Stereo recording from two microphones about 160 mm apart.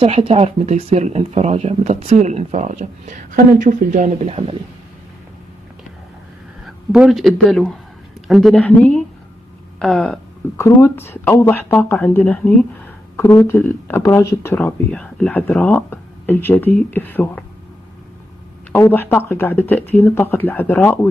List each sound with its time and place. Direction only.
0.0 s speech: 35° right (ahead or behind)
6.6 s speech: 5° right (ahead or behind)
10.6 s speech: 20° left (ahead or behind)
18.7 s speech: 15° left (ahead or behind)